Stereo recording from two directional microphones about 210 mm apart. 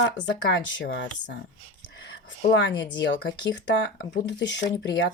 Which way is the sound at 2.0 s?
60° left (ahead or behind).